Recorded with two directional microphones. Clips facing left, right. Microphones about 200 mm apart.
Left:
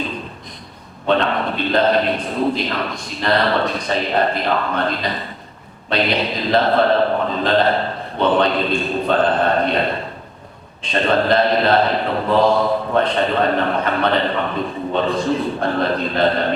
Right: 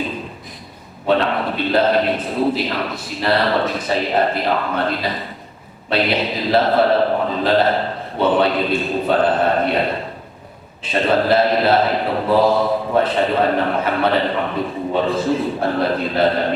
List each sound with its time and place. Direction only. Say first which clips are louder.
1.0 s a man's voice: even; 10° right (ahead or behind)
10.8 s a man's voice: right 1 dB; 5° right (ahead or behind)